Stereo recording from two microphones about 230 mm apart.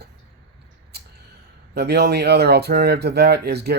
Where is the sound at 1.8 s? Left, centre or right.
Right.